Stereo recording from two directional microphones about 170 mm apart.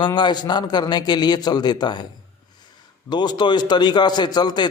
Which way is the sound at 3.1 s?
25° left (ahead or behind).